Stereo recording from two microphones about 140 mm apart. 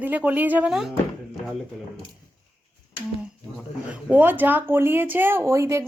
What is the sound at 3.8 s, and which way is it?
Speech, 10° right (ahead or behind).